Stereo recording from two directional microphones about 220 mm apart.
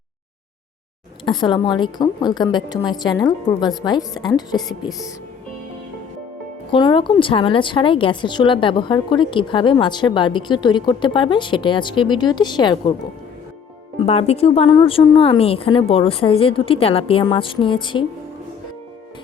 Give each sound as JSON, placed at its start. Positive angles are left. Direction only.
{"t": 1.2, "sound": "a woman's voice", "side_deg": 20}
{"t": 6.7, "sound": "a woman's voice", "side_deg": 25}
{"t": 14.0, "sound": "a woman's voice", "side_deg": 25}